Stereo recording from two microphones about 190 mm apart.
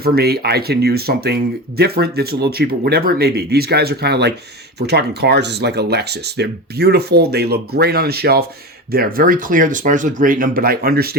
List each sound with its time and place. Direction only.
0.0 s speech: 55° right (ahead or behind)